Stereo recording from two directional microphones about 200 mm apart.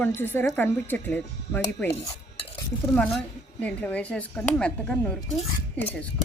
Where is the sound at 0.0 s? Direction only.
10° left (ahead or behind).